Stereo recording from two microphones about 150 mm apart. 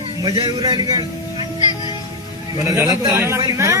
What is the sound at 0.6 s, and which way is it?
Speech, 30° right (ahead or behind).